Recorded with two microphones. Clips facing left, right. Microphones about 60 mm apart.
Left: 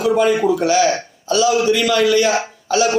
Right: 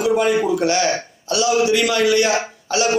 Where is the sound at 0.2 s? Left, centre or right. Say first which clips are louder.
Left 2 dB; centre.